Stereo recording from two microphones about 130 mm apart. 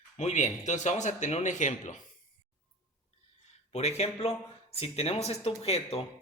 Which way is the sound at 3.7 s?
55° left (ahead or behind).